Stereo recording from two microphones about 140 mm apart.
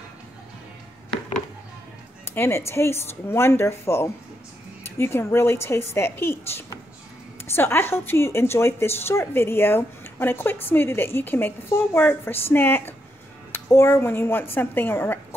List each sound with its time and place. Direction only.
2.3 s speech: 20° left (ahead or behind)